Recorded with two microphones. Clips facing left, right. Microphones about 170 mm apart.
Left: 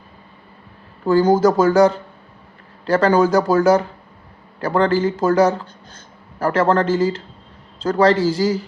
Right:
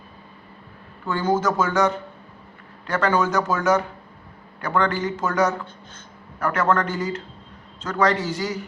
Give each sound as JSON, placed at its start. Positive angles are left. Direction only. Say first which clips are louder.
{"t": 1.0, "sound": "speech", "louder": "left 8 dB", "side_deg": 35}